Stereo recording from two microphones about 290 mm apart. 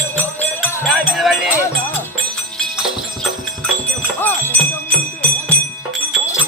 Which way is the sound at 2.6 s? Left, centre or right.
Centre.